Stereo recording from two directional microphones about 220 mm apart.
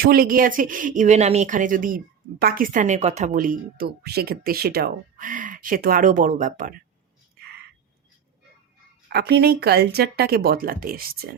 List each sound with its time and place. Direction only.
0.0 s speech: 40° right (ahead or behind)
9.0 s a woman's voice: 45° right (ahead or behind)